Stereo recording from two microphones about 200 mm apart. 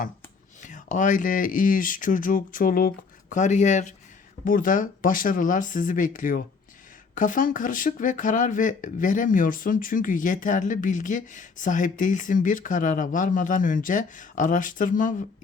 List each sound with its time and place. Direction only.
0.6 s speech: 40° left (ahead or behind)